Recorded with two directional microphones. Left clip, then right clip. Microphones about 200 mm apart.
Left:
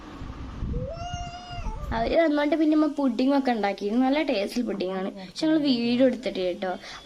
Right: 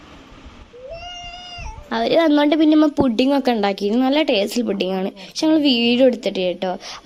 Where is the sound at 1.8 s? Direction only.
40° right (ahead or behind).